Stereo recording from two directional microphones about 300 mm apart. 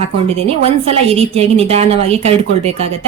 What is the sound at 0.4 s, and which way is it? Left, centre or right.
A woman's voice, centre.